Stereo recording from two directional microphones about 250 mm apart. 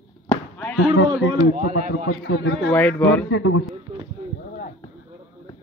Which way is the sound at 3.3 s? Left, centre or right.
Left.